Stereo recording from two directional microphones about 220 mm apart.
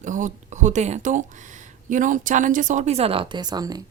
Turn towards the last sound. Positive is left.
turn(degrees=-20)  # may be behind; listen again after turning